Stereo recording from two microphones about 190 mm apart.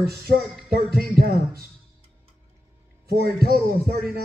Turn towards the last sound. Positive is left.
turn(degrees=-55)  # may be behind; listen again after turning